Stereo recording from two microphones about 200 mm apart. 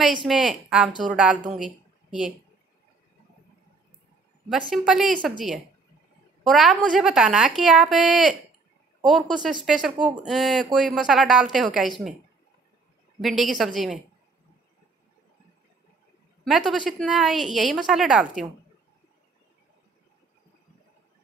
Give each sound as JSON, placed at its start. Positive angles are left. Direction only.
{"t": 0.2, "sound": "a woman's voice", "side_deg": 0}
{"t": 4.5, "sound": "speech", "side_deg": 0}
{"t": 6.4, "sound": "speech", "side_deg": 0}
{"t": 13.2, "sound": "speech", "side_deg": 0}
{"t": 16.4, "sound": "speech", "side_deg": 0}